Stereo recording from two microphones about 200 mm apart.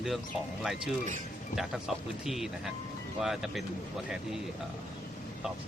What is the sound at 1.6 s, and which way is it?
Speech, centre (ahead or behind).